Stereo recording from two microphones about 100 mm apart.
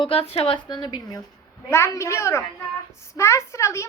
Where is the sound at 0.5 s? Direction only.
50° left (ahead or behind).